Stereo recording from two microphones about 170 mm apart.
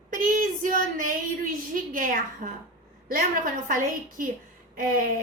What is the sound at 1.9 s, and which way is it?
A woman's voice, 55° right (ahead or behind).